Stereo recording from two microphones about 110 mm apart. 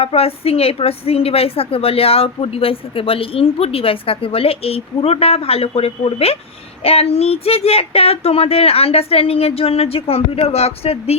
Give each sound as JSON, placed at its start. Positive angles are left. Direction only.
{"t": 0.0, "sound": "a woman's voice", "side_deg": 60}